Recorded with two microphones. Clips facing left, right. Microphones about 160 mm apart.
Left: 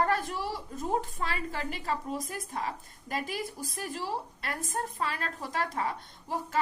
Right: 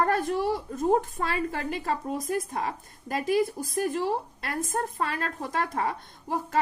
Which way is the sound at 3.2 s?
45° right (ahead or behind).